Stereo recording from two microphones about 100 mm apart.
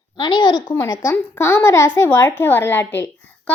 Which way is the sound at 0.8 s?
30° left (ahead or behind).